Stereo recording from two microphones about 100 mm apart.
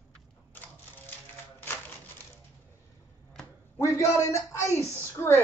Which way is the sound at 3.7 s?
30° left (ahead or behind).